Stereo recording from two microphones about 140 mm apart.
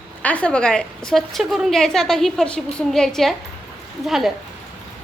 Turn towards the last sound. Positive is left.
turn(degrees=0)  # may be behind; listen again after turning